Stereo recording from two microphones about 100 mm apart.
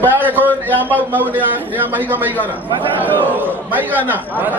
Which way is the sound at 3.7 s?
15° right (ahead or behind).